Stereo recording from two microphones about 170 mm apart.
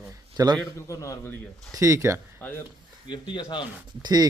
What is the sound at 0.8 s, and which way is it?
Speech, 20° left (ahead or behind).